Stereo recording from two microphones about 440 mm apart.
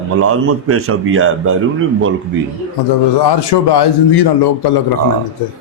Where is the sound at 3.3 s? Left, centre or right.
Left.